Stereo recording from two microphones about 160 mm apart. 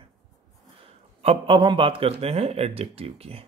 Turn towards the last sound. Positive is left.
turn(degrees=-35)  # may be behind; listen again after turning